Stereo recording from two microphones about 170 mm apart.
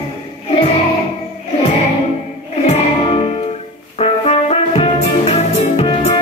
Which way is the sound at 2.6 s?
35° left (ahead or behind).